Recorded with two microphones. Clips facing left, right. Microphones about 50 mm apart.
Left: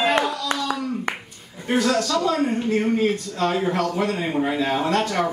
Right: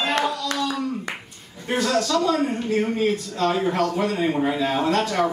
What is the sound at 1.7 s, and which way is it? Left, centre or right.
A man's voice, centre.